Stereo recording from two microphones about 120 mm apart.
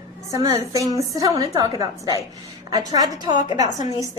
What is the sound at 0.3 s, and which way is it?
A woman's voice, 30° right (ahead or behind).